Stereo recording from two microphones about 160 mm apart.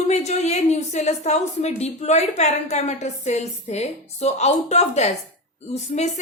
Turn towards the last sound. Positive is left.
turn(degrees=45)  # may be behind; listen again after turning